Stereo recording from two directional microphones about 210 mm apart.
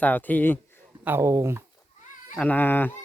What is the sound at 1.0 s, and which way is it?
Speech, 10° right (ahead or behind).